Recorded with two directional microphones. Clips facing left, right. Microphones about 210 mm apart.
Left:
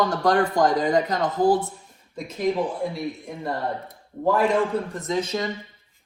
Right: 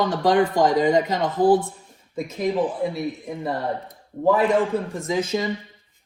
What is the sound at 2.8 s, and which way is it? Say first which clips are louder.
Speech: right 3 dB; 5° right (ahead or behind).